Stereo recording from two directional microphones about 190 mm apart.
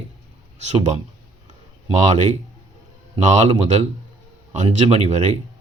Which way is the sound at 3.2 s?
40° right (ahead or behind).